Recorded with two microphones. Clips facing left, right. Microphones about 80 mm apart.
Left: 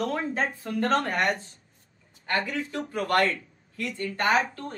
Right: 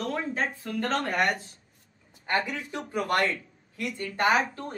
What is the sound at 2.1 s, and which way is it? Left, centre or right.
Speech, centre.